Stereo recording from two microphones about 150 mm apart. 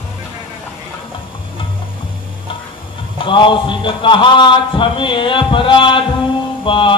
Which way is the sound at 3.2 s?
35° left (ahead or behind).